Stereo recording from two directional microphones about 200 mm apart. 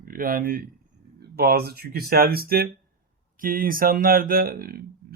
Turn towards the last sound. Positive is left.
turn(degrees=-50)  # may be behind; listen again after turning